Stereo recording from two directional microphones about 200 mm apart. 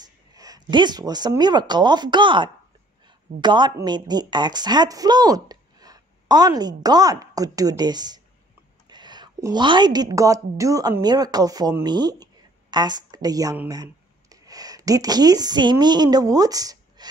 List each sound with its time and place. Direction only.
0.0 s a woman's voice: 20° right (ahead or behind)